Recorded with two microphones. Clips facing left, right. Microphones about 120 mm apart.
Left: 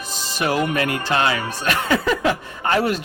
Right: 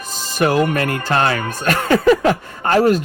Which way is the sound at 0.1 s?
45° right (ahead or behind).